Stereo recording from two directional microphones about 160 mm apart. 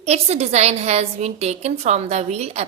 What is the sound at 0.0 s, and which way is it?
A woman's voice, 40° right (ahead or behind).